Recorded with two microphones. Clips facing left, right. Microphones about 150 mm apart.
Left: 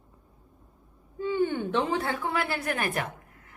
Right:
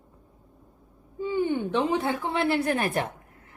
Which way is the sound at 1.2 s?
15° right (ahead or behind).